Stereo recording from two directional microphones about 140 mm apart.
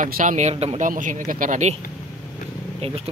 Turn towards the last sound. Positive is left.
turn(degrees=-45)  # may be behind; listen again after turning